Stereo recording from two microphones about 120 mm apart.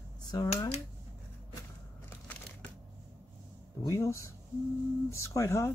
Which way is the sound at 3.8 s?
25° left (ahead or behind).